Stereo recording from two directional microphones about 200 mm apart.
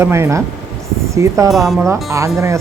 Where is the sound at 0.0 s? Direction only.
15° right (ahead or behind).